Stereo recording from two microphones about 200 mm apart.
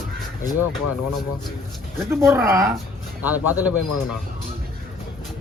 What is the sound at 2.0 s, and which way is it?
Speech, 10° right (ahead or behind).